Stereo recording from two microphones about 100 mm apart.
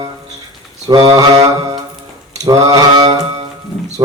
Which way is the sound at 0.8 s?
40° right (ahead or behind).